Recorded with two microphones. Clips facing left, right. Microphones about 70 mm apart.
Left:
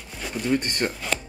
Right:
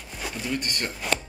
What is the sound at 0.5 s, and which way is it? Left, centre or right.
Speech, left.